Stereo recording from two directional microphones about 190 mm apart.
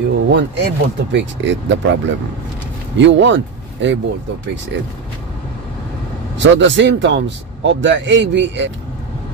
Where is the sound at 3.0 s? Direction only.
75° right (ahead or behind).